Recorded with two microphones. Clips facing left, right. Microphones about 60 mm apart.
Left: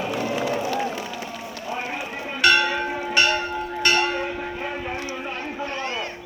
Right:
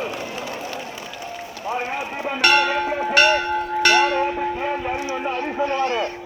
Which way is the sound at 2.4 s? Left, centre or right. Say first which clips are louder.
Right 1 dB; right.